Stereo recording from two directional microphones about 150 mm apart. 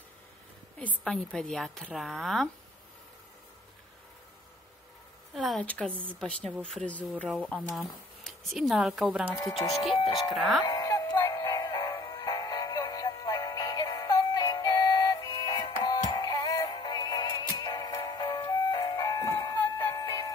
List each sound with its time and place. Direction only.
0.7 s a woman's voice: 5° left (ahead or behind)
5.3 s a woman's voice: centre (ahead or behind)
9.4 s speech: 25° left (ahead or behind)
10.6 s music: 25° left (ahead or behind)
15.2 s synthetic singing: 30° left (ahead or behind)